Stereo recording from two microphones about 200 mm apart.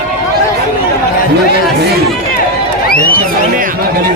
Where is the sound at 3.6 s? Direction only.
45° right (ahead or behind).